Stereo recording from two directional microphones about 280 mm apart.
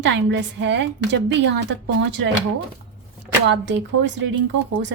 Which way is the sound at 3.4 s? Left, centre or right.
Right.